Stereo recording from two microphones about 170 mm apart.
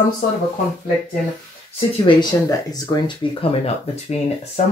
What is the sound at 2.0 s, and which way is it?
Speech, 20° left (ahead or behind).